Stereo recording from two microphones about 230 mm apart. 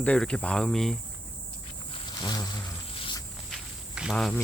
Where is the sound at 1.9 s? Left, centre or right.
Centre.